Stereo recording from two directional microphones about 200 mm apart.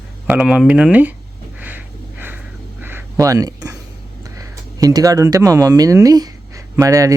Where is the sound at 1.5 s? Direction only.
10° right (ahead or behind).